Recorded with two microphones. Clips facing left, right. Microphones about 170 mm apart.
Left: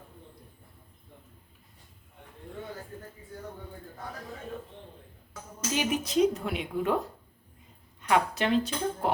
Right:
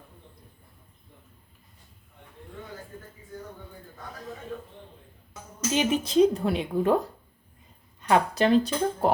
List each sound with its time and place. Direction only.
5.3 s speech: 25° right (ahead or behind)
8.0 s speech: 35° right (ahead or behind)